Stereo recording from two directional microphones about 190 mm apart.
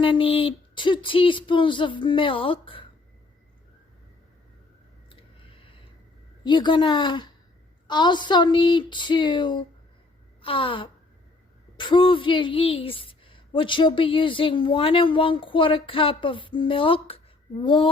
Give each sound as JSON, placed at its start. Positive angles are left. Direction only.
{"t": 0.0, "sound": "a woman's voice", "side_deg": 25}
{"t": 5.5, "sound": "a sound", "side_deg": 30}
{"t": 6.4, "sound": "a woman's voice", "side_deg": 25}